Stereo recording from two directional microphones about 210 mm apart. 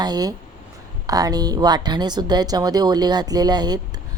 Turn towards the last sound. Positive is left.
turn(degrees=-20)  # may be behind; listen again after turning